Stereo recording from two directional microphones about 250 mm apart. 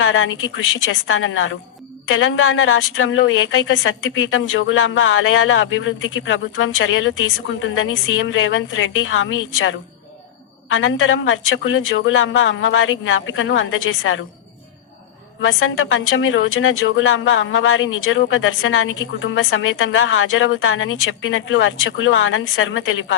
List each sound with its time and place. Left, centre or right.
0.0 s a woman's voice: left
15.4 s a woman's voice: left